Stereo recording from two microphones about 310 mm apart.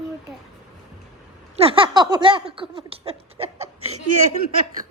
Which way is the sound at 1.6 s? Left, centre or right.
Centre.